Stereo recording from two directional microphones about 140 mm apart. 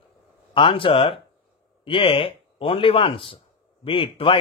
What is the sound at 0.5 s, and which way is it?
Speech, 40° left (ahead or behind).